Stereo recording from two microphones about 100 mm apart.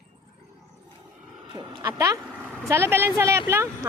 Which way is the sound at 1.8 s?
30° right (ahead or behind).